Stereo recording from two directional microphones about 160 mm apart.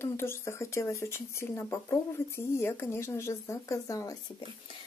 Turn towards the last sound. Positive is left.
turn(degrees=20)  # may be behind; listen again after turning